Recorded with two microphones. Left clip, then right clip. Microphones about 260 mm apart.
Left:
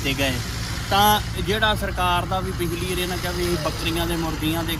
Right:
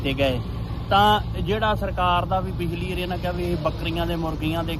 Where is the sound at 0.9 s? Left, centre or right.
Centre.